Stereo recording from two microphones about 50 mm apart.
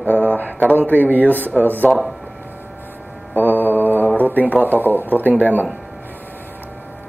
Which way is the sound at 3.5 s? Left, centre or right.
Left.